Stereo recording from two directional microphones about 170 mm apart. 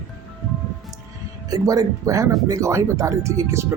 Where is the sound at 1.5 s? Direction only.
20° right (ahead or behind).